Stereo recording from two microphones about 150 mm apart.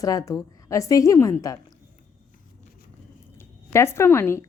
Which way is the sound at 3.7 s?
15° left (ahead or behind).